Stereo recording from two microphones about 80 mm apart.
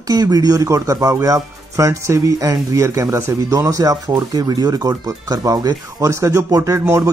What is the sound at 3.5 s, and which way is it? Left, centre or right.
Speech, right.